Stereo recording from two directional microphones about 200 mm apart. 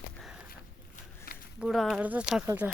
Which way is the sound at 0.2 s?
5° right (ahead or behind).